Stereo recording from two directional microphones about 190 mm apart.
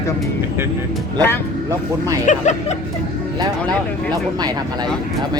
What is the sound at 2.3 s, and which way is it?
Speech, 45° left (ahead or behind).